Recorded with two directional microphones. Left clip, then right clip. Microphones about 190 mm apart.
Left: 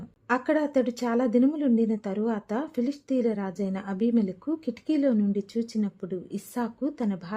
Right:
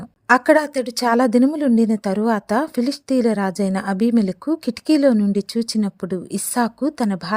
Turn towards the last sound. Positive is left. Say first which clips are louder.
# right 9 dB
turn(degrees=-40)  # may be behind; listen again after turning